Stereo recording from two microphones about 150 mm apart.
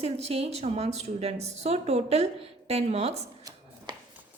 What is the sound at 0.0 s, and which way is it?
A woman's voice, 45° right (ahead or behind).